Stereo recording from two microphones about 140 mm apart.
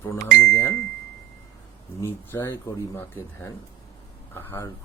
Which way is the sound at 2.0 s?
15° left (ahead or behind).